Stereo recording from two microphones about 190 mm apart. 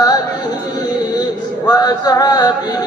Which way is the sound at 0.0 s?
20° left (ahead or behind).